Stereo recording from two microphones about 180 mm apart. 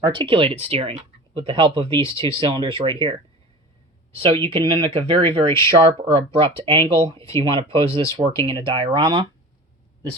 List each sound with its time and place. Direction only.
0.0 s speech: 30° right (ahead or behind)
4.1 s speech: 30° right (ahead or behind)